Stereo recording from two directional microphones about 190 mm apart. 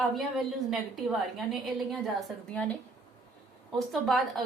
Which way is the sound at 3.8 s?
Centre (ahead or behind).